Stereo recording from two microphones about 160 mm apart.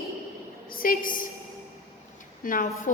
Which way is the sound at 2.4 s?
55° left (ahead or behind).